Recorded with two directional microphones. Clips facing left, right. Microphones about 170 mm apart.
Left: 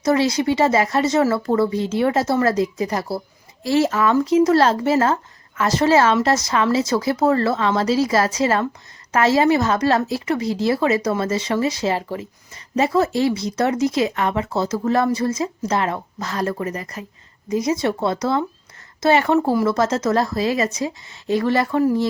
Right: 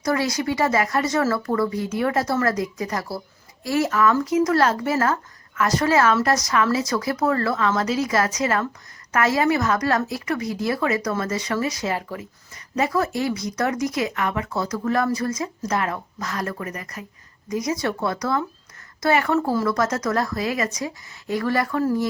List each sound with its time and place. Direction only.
0.0 s speech: 25° left (ahead or behind)